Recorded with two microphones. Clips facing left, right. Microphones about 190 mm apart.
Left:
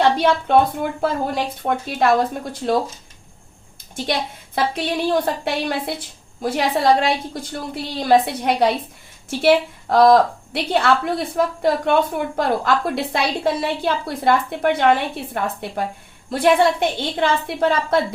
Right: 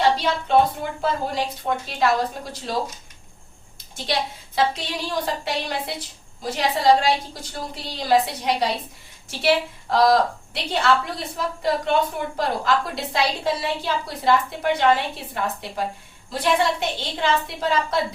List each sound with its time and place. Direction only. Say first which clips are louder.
0.0 s a woman's voice: left 4 dB; 55° left (ahead or behind)
3.9 s a woman's voice: left 2 dB; 55° left (ahead or behind)